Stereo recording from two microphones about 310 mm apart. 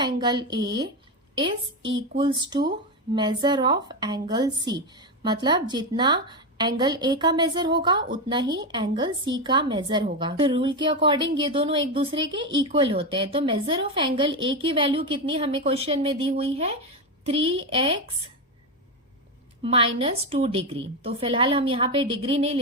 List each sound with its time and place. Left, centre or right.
0.0 s speech: centre
2.0 s speech: centre
19.6 s speech: centre